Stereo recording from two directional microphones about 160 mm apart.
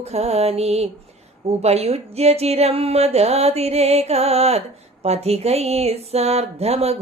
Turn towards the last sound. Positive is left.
turn(degrees=-40)  # may be behind; listen again after turning